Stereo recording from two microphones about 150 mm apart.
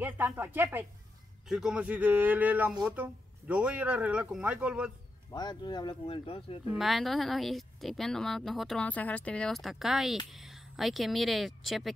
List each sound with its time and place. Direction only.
0.0 s speech: 15° right (ahead or behind)
5.3 s speech: 30° left (ahead or behind)
6.7 s speech: centre (ahead or behind)